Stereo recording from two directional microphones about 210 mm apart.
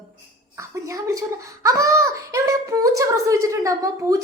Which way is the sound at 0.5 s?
15° right (ahead or behind).